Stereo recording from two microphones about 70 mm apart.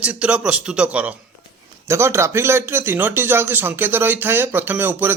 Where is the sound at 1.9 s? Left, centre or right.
Right.